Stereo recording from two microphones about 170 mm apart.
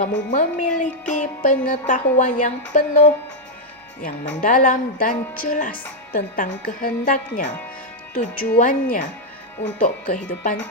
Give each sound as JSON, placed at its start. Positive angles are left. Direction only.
{"t": 0.0, "sound": "a woman's voice", "side_deg": 50}